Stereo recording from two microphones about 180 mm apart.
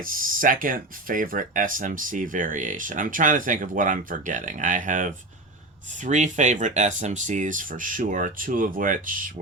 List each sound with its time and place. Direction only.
0.0 s speech: 50° right (ahead or behind)